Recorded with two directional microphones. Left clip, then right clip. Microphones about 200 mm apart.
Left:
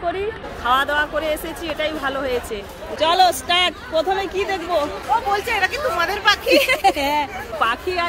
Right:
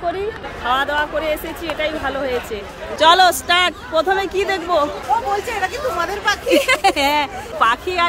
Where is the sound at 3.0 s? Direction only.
15° right (ahead or behind).